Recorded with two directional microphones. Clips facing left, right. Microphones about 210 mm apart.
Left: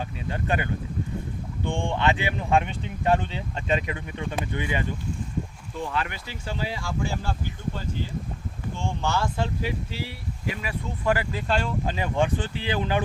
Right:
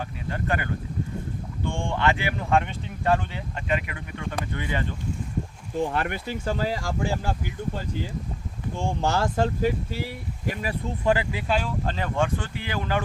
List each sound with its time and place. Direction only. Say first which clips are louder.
0.3 s speech: left 1 dB; 20° left (ahead or behind)
5.7 s speech: right 4 dB; 50° right (ahead or behind)
8.8 s speech: right 3 dB; 40° right (ahead or behind)
11.0 s speech: right 1 dB; 20° right (ahead or behind)
11.9 s speech: left 1 dB; 15° left (ahead or behind)